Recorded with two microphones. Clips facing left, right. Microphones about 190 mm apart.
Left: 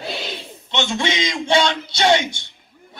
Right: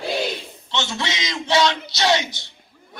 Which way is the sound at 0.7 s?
25° left (ahead or behind).